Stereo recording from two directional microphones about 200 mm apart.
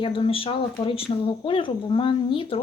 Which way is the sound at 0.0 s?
25° left (ahead or behind).